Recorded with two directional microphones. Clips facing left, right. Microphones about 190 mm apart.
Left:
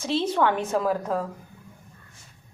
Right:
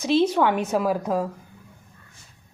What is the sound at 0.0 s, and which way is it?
A woman's voice, 15° right (ahead or behind).